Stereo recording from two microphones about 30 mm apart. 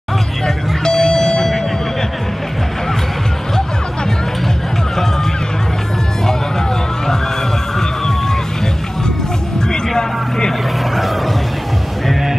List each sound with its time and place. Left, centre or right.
0.8 s vehicle: centre
9.7 s vehicle: left